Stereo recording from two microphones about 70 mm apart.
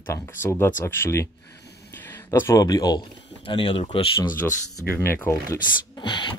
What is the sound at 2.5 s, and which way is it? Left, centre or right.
Speech, left.